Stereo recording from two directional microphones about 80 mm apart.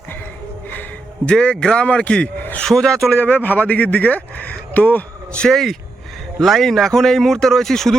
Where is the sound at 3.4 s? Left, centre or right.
Left.